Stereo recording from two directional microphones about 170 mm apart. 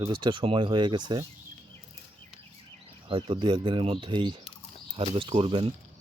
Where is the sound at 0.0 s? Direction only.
25° right (ahead or behind).